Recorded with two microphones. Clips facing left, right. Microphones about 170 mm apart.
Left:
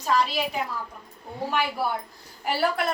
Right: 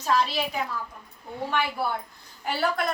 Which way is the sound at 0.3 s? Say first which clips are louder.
Left 1 dB; 10° left (ahead or behind).